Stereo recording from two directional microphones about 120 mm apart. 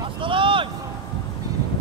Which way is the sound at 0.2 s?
45° right (ahead or behind).